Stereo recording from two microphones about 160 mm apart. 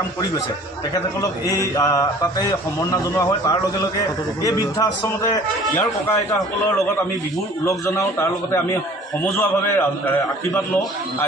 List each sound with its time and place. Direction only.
1.2 s a man's voice: 20° left (ahead or behind)
7.6 s a man's voice: 20° left (ahead or behind)